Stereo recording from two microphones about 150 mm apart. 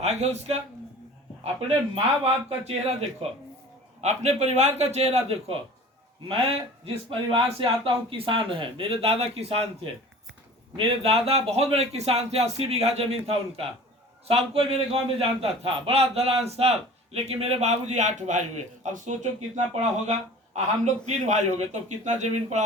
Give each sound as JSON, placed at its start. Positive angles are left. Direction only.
{"t": 0.0, "sound": "speech", "side_deg": -45}
{"t": 2.2, "sound": "a man's voice", "side_deg": -40}
{"t": 6.8, "sound": "a man's voice", "side_deg": -35}